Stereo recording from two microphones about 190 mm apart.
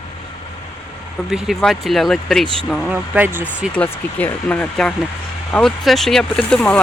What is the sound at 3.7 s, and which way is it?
Speech, 10° left (ahead or behind).